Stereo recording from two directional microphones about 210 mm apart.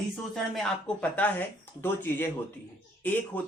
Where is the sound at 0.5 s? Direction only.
5° left (ahead or behind).